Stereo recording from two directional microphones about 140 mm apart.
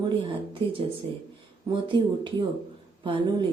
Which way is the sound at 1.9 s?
35° right (ahead or behind).